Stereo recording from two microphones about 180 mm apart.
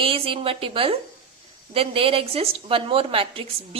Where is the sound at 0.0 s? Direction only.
30° right (ahead or behind).